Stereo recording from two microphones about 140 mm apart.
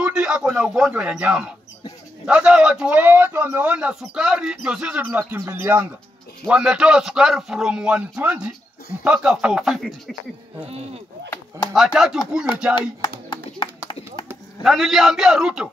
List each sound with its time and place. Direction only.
0.0 s a man's voice: 5° right (ahead or behind)
10.7 s speech: 45° right (ahead or behind)
11.7 s a man's voice: centre (ahead or behind)
13.3 s a sound: 35° left (ahead or behind)
14.6 s a man's voice: centre (ahead or behind)